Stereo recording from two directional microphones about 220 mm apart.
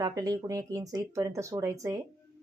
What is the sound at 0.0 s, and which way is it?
Speech, 15° right (ahead or behind).